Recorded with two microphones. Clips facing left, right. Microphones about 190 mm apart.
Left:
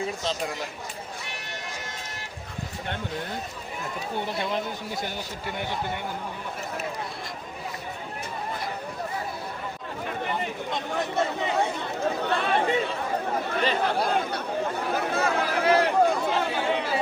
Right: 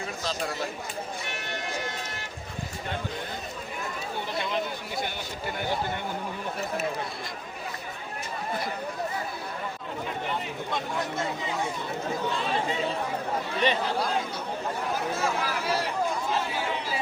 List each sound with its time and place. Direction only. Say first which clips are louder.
10.9 s speech: left 4 dB; 65° left (ahead or behind)
13.8 s speech: left 3 dB; 60° left (ahead or behind)
14.9 s a sound: left 5 dB; 60° left (ahead or behind)